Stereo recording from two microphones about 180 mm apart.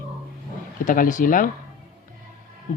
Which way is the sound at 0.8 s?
45° left (ahead or behind).